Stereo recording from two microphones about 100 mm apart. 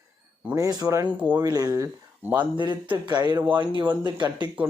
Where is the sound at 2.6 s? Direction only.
50° right (ahead or behind).